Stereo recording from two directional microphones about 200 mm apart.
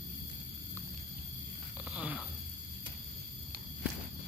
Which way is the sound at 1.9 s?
5° right (ahead or behind).